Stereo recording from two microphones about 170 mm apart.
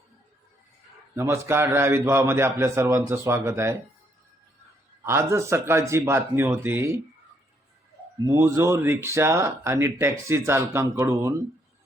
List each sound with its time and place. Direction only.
1.1 s speech: 15° right (ahead or behind)
5.0 s speech: 15° right (ahead or behind)
8.3 s speech: 15° right (ahead or behind)